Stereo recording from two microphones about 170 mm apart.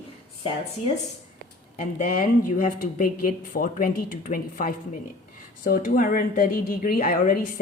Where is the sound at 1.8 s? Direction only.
50° left (ahead or behind).